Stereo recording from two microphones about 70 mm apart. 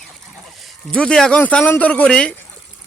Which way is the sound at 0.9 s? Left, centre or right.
Centre.